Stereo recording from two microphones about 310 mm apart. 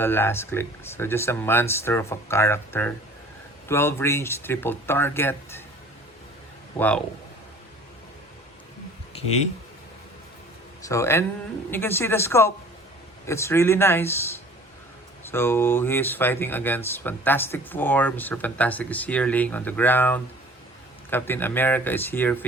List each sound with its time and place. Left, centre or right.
0.0 s speech: centre
6.7 s speech: centre
9.1 s a sound: centre
10.8 s speech: centre
15.2 s speech: centre